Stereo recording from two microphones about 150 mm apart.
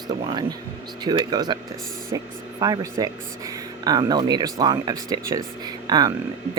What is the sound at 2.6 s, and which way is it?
Speech, 25° right (ahead or behind).